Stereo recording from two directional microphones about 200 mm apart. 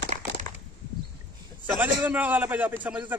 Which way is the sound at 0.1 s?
35° right (ahead or behind).